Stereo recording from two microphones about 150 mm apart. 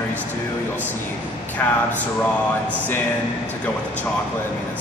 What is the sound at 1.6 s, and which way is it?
Speech, 15° left (ahead or behind).